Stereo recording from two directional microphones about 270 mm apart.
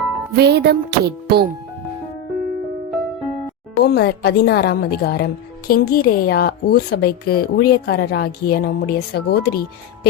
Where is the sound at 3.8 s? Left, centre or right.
Left.